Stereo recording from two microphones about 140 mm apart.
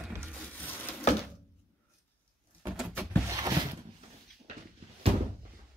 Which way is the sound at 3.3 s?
30° right (ahead or behind).